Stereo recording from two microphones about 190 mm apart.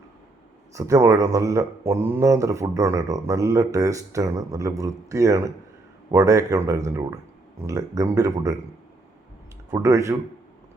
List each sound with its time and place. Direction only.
0.7 s speech: 15° right (ahead or behind)
9.7 s speech: 15° right (ahead or behind)